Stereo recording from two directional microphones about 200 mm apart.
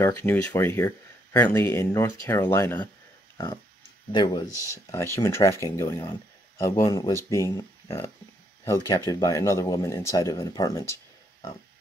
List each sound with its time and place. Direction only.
0.0 s speech: 10° left (ahead or behind)
4.1 s speech: 20° left (ahead or behind)